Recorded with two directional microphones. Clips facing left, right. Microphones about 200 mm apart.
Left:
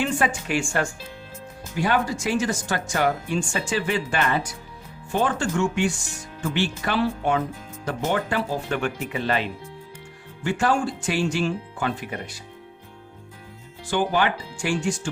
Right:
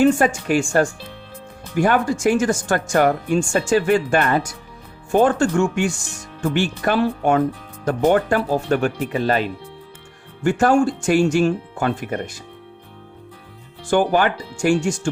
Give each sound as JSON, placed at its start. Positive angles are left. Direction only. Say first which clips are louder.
{"t": 0.0, "sound": "speech", "louder": "right 8 dB", "side_deg": -45}
{"t": 13.9, "sound": "speech", "louder": "right 5 dB", "side_deg": -50}